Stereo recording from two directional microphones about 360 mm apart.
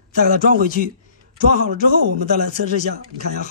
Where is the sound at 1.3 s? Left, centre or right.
Right.